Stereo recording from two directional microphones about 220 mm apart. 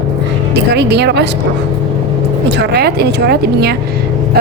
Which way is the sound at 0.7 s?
50° right (ahead or behind).